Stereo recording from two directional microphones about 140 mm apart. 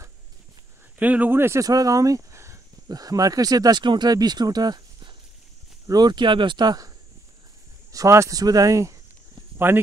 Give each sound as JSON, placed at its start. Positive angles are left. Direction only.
{"t": 0.9, "sound": "speech", "side_deg": -10}
{"t": 7.9, "sound": "speech", "side_deg": -20}